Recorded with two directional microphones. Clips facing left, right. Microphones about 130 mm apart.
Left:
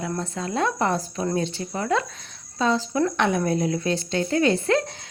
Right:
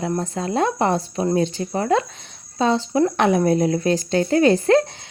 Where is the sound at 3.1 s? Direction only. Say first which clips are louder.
Right 5 dB; 35° right (ahead or behind).